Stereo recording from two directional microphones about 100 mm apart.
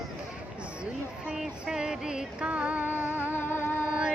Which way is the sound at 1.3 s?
5° right (ahead or behind).